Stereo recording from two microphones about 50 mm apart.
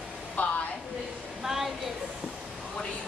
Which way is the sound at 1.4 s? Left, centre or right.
Centre.